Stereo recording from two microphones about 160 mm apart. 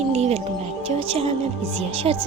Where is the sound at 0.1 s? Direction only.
40° right (ahead or behind).